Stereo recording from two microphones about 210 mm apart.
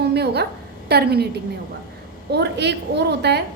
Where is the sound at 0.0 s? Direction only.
50° right (ahead or behind).